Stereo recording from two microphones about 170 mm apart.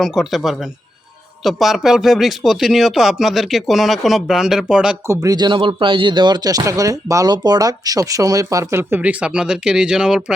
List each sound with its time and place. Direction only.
0.0 s speech: centre (ahead or behind)
5.0 s speech: 20° right (ahead or behind)